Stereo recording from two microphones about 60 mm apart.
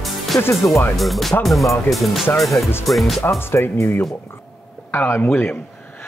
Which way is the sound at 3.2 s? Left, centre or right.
Left.